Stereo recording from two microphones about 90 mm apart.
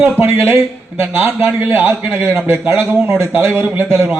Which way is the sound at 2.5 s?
25° right (ahead or behind).